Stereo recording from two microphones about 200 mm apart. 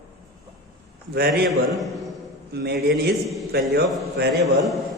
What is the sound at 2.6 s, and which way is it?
A man's voice, 55° right (ahead or behind).